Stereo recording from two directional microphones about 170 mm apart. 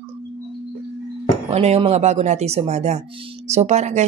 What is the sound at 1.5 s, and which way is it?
Speech, 35° right (ahead or behind).